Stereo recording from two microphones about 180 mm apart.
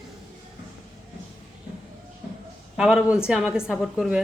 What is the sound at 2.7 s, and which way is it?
A woman's voice, 5° right (ahead or behind).